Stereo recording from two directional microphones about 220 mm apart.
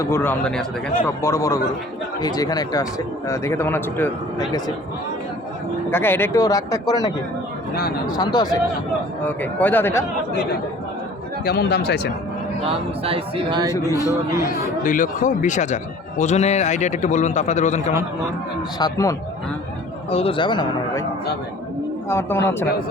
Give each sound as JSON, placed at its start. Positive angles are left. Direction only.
{"t": 0.0, "sound": "a man's voice", "side_deg": 10}
{"t": 5.9, "sound": "a man's voice", "side_deg": 10}
{"t": 7.7, "sound": "speech", "side_deg": 45}
{"t": 8.0, "sound": "a man's voice", "side_deg": 20}
{"t": 9.2, "sound": "a man's voice", "side_deg": 10}
{"t": 11.4, "sound": "speech", "side_deg": 50}
{"t": 12.6, "sound": "speech", "side_deg": -25}
{"t": 14.4, "sound": "a man's voice", "side_deg": 35}
{"t": 18.8, "sound": "a man's voice", "side_deg": 15}
{"t": 20.1, "sound": "speech", "side_deg": 25}
{"t": 22.1, "sound": "a man's voice", "side_deg": 10}